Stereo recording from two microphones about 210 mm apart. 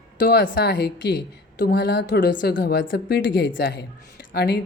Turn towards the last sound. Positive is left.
turn(degrees=50)  # may be behind; listen again after turning